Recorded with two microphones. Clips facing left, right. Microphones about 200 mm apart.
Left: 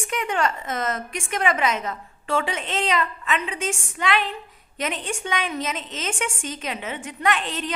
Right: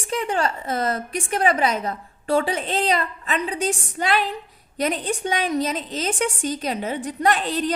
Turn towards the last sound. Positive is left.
turn(degrees=-35)  # may be behind; listen again after turning